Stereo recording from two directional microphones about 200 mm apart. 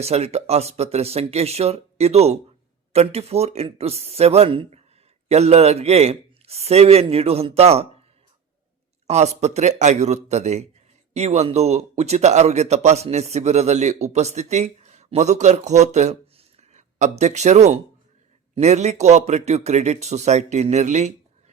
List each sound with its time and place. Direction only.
0.0 s speech: 30° right (ahead or behind)
9.0 s speech: 35° right (ahead or behind)